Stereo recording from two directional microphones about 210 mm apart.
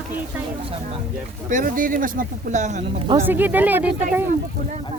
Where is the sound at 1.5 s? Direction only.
40° right (ahead or behind).